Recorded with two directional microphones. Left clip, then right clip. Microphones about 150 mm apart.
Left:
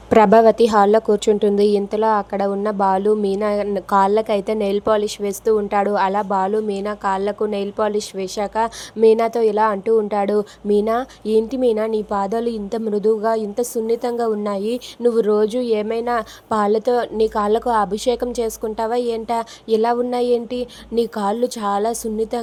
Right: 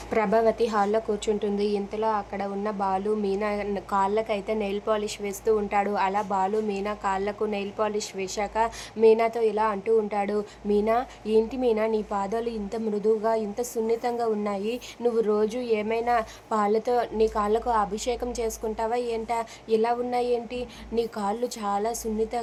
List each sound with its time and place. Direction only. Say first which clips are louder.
0.1 s a woman's voice: left 11 dB; 55° left (ahead or behind)